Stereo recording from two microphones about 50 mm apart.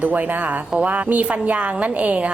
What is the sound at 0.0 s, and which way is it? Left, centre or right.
A woman's voice, right.